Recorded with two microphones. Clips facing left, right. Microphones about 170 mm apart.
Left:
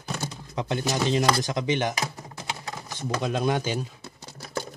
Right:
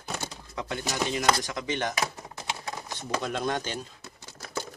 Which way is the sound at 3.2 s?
10° left (ahead or behind).